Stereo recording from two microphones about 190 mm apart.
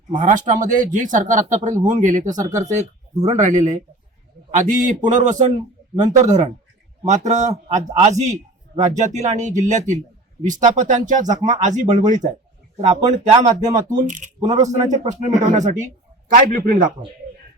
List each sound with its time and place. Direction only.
0.1 s a man's voice: 40° right (ahead or behind)
5.0 s a man's voice: 40° right (ahead or behind)
12.8 s speech: 25° right (ahead or behind)
13.1 s a man's voice: 40° right (ahead or behind)